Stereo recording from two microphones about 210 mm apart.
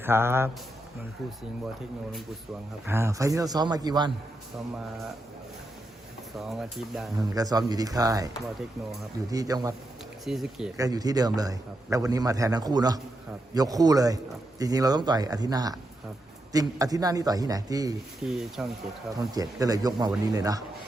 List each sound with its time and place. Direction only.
0.0 s a man's voice: 10° right (ahead or behind)
2.8 s a man's voice: 10° right (ahead or behind)
6.3 s speech: centre (ahead or behind)
7.2 s a man's voice: 15° right (ahead or behind)
9.3 s a man's voice: 15° right (ahead or behind)
10.2 s speech: centre (ahead or behind)
10.8 s a man's voice: 15° right (ahead or behind)
18.3 s speech: centre (ahead or behind)
19.3 s a man's voice: 15° right (ahead or behind)